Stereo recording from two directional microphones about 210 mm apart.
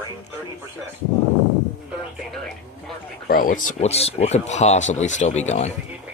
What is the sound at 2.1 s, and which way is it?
Speech, centre (ahead or behind).